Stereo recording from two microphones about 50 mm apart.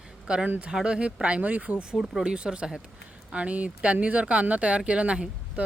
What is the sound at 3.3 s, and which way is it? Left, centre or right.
Speech, right.